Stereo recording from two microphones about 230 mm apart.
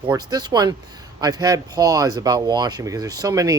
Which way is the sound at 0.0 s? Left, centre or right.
Centre.